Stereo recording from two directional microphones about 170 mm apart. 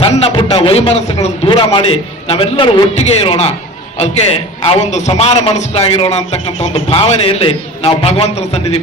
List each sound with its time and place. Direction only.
0.0 s a man's voice: 35° left (ahead or behind)
2.9 s a man's voice: 40° left (ahead or behind)
4.6 s a man's voice: 40° left (ahead or behind)